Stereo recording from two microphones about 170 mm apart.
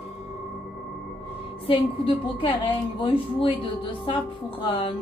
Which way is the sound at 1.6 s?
35° left (ahead or behind).